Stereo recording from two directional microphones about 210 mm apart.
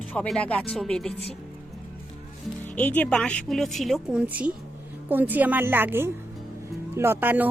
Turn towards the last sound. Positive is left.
turn(degrees=-10)  # may be behind; listen again after turning